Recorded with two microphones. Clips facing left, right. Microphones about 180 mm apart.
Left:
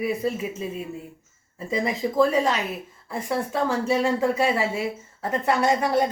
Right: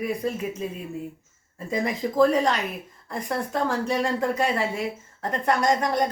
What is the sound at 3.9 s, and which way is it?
Speech, 5° left (ahead or behind).